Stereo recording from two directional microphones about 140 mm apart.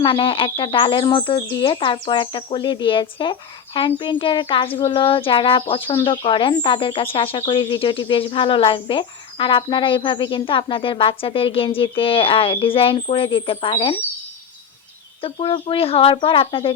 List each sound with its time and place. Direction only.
0.0 s speech: 40° left (ahead or behind)
15.2 s speech: 40° left (ahead or behind)